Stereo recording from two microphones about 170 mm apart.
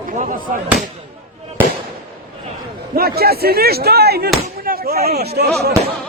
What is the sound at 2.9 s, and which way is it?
Slam, 65° right (ahead or behind).